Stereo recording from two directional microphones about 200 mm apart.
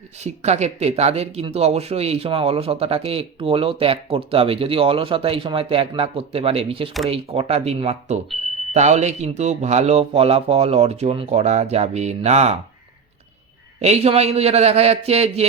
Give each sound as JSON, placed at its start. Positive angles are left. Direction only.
{"t": 0.2, "sound": "speech", "side_deg": -35}
{"t": 13.8, "sound": "speech", "side_deg": -30}